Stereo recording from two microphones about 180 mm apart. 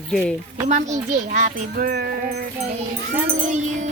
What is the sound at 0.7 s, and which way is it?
Speech, 40° right (ahead or behind).